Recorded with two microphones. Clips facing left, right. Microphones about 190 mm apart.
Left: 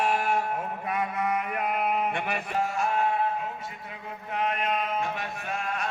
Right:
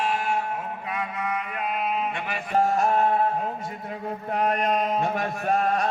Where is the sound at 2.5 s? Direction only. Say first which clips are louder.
Right 7 dB; 40° right (ahead or behind).